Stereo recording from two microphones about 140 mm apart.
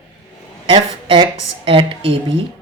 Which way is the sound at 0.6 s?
35° right (ahead or behind).